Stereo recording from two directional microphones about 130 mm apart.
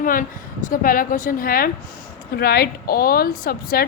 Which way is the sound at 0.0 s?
90° left.